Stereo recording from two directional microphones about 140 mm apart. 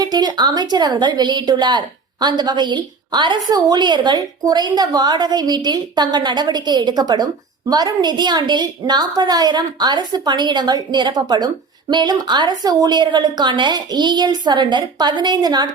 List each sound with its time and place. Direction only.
0.0 s a woman's voice: 30° right (ahead or behind)